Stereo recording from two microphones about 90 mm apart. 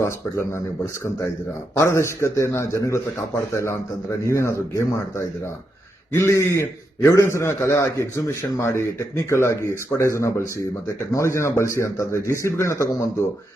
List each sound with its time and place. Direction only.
0.0 s speech: 30° left (ahead or behind)
1.8 s a man's voice: 30° left (ahead or behind)